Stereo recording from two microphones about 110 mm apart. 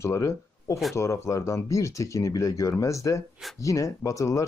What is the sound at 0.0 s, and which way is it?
Speech, 25° left (ahead or behind).